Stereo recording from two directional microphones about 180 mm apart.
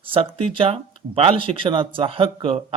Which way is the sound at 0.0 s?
30° right (ahead or behind).